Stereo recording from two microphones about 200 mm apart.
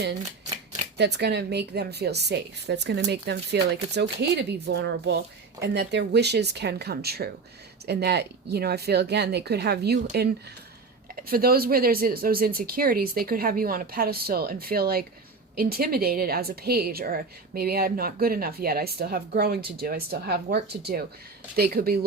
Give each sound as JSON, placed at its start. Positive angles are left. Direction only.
{"t": 0.9, "sound": "a woman's voice", "side_deg": -55}
{"t": 11.1, "sound": "a woman's voice", "side_deg": -45}